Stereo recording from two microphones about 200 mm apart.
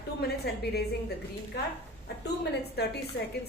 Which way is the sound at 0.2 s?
55° left (ahead or behind).